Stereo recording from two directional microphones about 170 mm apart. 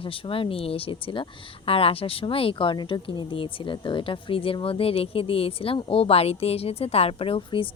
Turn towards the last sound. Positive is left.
turn(degrees=35)  # may be behind; listen again after turning